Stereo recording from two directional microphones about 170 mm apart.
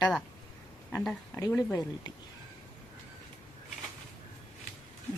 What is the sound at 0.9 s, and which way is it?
Speech, 5° left (ahead or behind).